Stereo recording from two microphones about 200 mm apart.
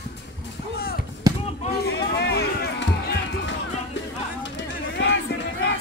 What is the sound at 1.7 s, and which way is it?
Music, 55° left (ahead or behind).